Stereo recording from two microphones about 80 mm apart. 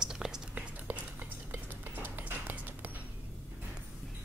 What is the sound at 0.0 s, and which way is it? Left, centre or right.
Whispering, centre.